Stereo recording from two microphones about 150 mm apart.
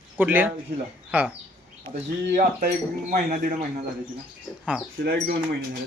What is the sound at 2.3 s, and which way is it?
Speech, 80° right.